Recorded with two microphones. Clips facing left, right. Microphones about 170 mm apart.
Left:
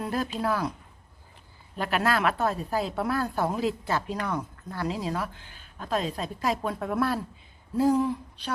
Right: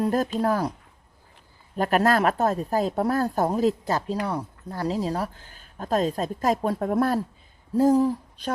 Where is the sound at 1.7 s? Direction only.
45° right (ahead or behind).